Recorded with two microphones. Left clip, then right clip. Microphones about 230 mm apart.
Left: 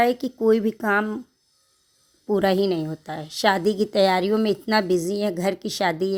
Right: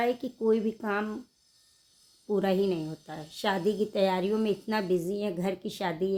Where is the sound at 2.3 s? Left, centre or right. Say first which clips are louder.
Left 7 dB; left.